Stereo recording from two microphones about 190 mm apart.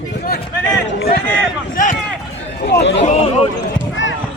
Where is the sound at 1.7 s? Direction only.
40° left (ahead or behind).